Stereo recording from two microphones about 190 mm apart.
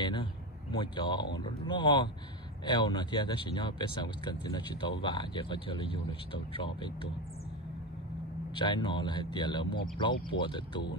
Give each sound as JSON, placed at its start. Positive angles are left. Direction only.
{"t": 0.0, "sound": "speech", "side_deg": 25}
{"t": 8.5, "sound": "speech", "side_deg": 25}